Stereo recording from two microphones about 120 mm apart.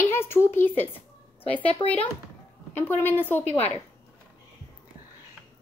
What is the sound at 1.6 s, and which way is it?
Speech, 50° left (ahead or behind).